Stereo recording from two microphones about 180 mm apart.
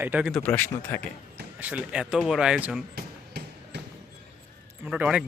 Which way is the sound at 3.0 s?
65° right (ahead or behind).